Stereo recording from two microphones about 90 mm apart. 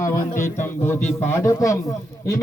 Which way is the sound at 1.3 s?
35° left (ahead or behind).